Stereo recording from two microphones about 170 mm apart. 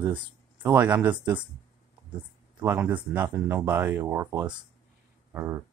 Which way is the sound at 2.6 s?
10° right (ahead or behind).